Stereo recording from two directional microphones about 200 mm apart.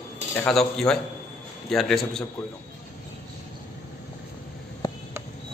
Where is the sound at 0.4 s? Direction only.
5° left (ahead or behind).